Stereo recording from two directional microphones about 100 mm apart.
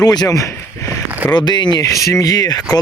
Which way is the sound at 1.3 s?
45° left (ahead or behind).